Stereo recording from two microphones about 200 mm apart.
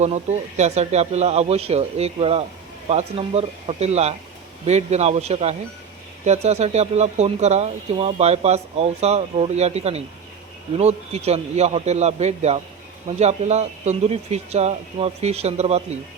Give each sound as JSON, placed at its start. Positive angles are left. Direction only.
{"t": 0.0, "sound": "speech", "side_deg": -35}